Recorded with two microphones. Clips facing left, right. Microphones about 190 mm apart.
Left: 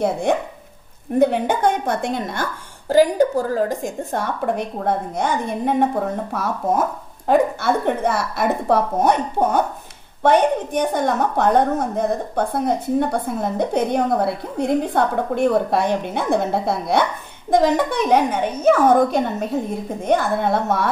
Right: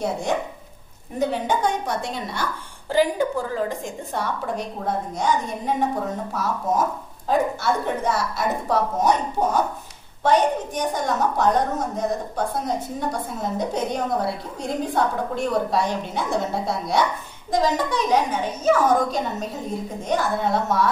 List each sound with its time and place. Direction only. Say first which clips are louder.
0.0 s a woman's voice: left 5 dB; 60° left (ahead or behind)
2.9 s a woman's voice: left 6 dB; 40° left (ahead or behind); by 5.3 s 60° left (ahead or behind)
6.3 s a woman's voice: left 2 dB; 60° left (ahead or behind)